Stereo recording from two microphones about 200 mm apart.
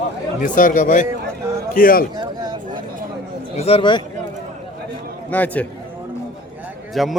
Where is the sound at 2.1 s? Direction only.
20° right (ahead or behind).